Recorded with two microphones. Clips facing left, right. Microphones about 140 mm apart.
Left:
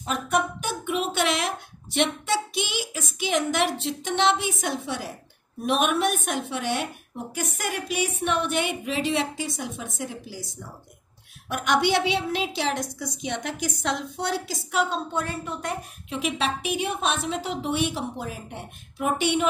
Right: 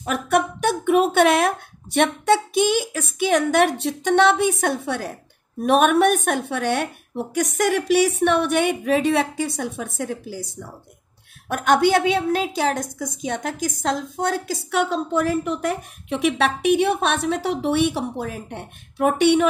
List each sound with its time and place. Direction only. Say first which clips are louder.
0.0 s a sound: right 5 dB; 65° right (ahead or behind)
2.0 s a woman's voice: right 6 dB; 55° right (ahead or behind)
11.4 s a woman's voice: right 6 dB; 50° right (ahead or behind)
15.2 s a woman's voice: right 9 dB; 90° right; by 19.4 s 60° right (ahead or behind)